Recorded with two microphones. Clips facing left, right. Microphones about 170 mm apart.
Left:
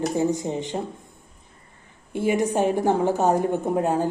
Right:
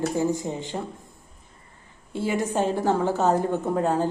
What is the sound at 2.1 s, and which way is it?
A woman's voice, 20° left (ahead or behind).